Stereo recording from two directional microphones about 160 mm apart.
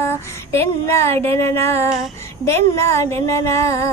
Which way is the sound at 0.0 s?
15° left (ahead or behind).